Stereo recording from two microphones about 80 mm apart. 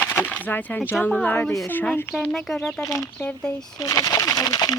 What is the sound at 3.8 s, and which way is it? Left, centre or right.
Speech, left.